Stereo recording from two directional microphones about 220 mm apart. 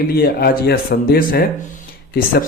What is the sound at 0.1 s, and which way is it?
Speech, 45° left (ahead or behind).